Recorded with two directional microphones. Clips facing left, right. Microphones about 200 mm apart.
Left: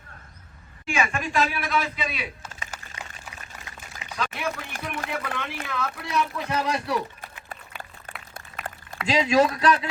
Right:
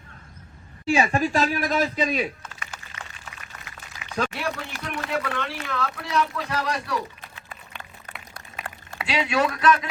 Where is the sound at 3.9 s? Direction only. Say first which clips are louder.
Left 1 dB; 50° left (ahead or behind).